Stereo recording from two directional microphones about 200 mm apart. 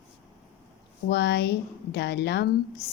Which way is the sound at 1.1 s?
55° left (ahead or behind).